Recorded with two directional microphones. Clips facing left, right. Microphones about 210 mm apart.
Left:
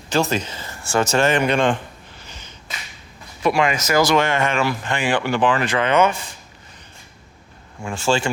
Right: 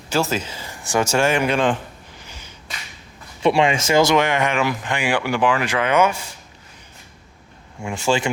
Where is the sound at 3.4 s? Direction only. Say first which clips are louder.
Right 2 dB; 30° right (ahead or behind); by 6.2 s 10° right (ahead or behind).